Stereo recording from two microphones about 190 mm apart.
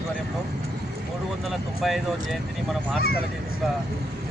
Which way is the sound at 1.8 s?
Centre (ahead or behind).